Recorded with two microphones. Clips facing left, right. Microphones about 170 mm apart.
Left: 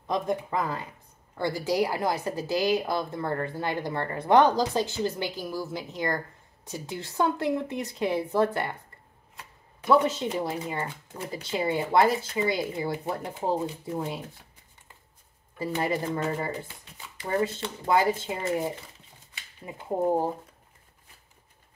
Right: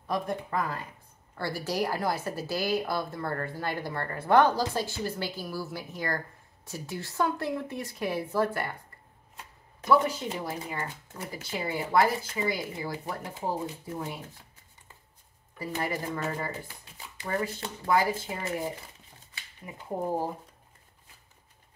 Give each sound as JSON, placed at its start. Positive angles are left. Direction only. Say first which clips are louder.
{"t": 0.0, "sound": "a woman's voice", "louder": "left 3 dB", "side_deg": 20}
{"t": 9.8, "sound": "a woman's voice", "louder": "left 2 dB", "side_deg": 25}
{"t": 15.6, "sound": "a woman's voice", "louder": "left 4 dB", "side_deg": 25}
{"t": 19.6, "sound": "a woman's voice", "louder": "left 4 dB", "side_deg": 30}